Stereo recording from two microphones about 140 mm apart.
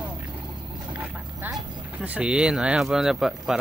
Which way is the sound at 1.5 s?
30° right (ahead or behind).